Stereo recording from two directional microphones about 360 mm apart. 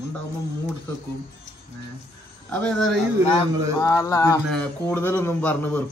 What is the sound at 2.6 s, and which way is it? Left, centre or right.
A man's voice, centre.